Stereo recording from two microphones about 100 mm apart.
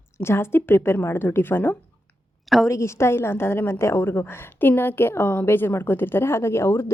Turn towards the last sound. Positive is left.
turn(degrees=25)  # may be behind; listen again after turning